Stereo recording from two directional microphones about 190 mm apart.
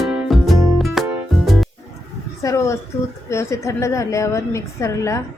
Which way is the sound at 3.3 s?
15° left (ahead or behind).